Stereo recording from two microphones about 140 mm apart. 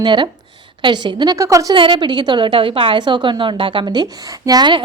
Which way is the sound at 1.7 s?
35° right (ahead or behind).